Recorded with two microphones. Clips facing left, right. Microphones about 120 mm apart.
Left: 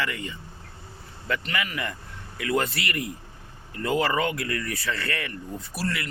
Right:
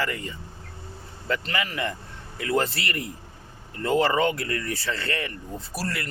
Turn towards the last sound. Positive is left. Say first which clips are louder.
# left 1 dB
turn(degrees=-40)  # may be behind; listen again after turning